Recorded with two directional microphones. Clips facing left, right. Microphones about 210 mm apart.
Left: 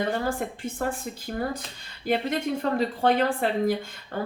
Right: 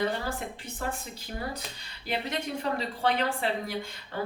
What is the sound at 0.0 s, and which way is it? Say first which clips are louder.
A woman's voice: left 4 dB; 50° left (ahead or behind).